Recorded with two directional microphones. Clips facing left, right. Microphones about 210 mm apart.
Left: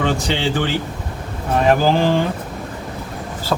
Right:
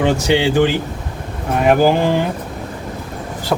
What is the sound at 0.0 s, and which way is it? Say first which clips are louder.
Speech: right 5 dB; 15° right (ahead or behind).